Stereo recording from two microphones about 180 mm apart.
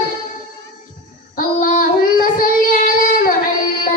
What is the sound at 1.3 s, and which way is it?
Child singing, 50° left (ahead or behind).